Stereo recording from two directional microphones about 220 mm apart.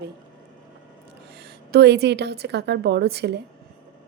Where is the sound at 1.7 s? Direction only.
45° right (ahead or behind).